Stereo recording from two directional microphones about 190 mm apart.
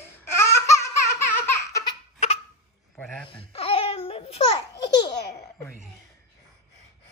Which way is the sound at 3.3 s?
30° left (ahead or behind).